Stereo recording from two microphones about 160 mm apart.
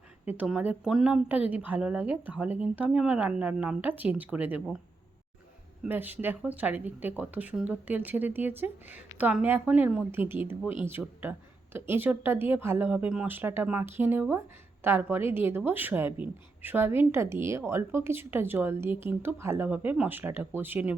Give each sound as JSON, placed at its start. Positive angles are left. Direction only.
{"t": 0.3, "sound": "speech", "side_deg": -10}
{"t": 5.8, "sound": "speech", "side_deg": -10}